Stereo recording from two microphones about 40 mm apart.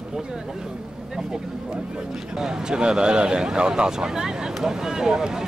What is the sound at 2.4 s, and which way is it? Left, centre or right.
Speech, centre.